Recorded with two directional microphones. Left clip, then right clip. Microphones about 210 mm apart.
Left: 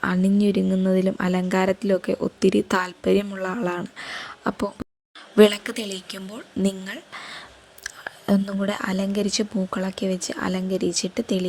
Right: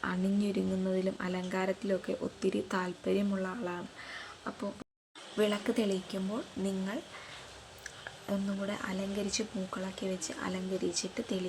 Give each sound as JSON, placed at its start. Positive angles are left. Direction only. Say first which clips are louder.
{"t": 0.0, "sound": "speech", "louder": "left 12 dB", "side_deg": 40}
{"t": 6.8, "sound": "a woman's voice", "louder": "left 6 dB", "side_deg": 45}